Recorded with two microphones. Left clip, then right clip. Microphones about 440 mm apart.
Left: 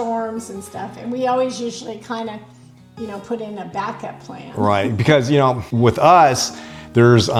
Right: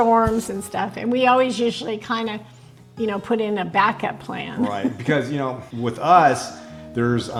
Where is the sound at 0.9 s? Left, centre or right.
Right.